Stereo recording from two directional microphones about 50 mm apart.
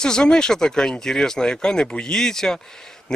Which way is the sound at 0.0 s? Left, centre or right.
Centre.